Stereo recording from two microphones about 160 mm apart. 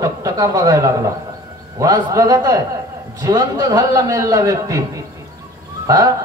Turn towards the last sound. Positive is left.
turn(degrees=-20)  # may be behind; listen again after turning